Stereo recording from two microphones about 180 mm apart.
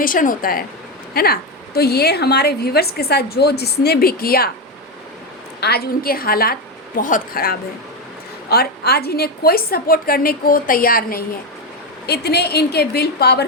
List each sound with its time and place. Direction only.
0.0 s a woman's voice: 50° left (ahead or behind)
5.5 s a woman's voice: 65° left (ahead or behind)
8.4 s a woman's voice: 60° left (ahead or behind)
12.0 s a woman's voice: 65° left (ahead or behind)